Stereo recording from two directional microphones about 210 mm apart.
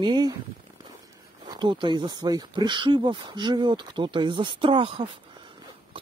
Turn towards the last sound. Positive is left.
turn(degrees=-25)  # may be behind; listen again after turning